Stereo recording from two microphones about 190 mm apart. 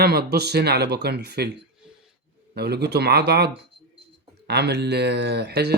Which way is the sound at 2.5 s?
60° right (ahead or behind).